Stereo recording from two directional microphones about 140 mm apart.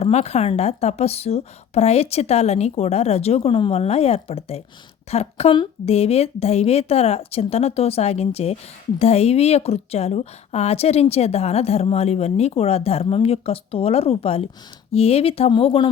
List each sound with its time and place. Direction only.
0.0 s a woman's voice: 50° left (ahead or behind)